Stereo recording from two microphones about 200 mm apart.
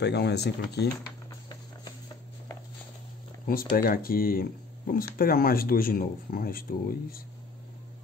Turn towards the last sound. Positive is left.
turn(degrees=45)  # may be behind; listen again after turning